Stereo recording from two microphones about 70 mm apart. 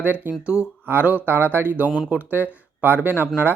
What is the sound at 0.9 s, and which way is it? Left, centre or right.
Speech, right.